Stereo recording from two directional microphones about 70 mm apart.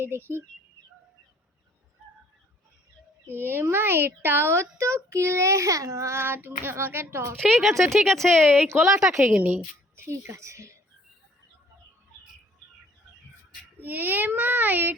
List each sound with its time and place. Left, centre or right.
3.2 s a child's voice: right
7.6 s speech: centre
8.4 s a child's voice: right
8.9 s a woman's voice: right
9.2 s a child's voice: right
9.9 s a woman's voice: right
13.7 s a child's voice: right